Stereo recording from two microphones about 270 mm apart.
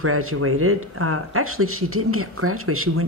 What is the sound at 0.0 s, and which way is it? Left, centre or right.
Speech, right.